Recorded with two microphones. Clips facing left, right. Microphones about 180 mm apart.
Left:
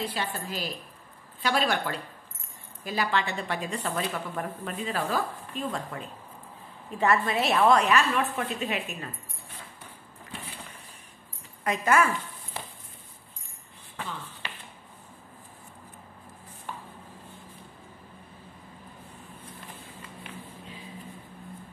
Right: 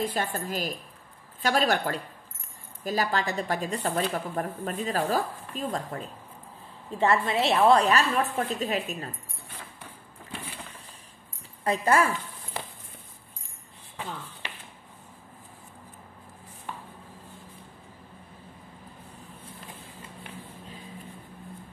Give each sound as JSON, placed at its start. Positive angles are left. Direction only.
{"t": 0.0, "sound": "a woman's voice", "side_deg": -50}
{"t": 7.0, "sound": "speech", "side_deg": -25}
{"t": 11.6, "sound": "speech", "side_deg": -30}